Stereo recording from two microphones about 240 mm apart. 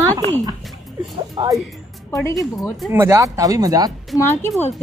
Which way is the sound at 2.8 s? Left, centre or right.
Centre.